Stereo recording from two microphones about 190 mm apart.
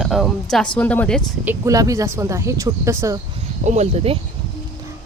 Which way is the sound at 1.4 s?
15° right (ahead or behind).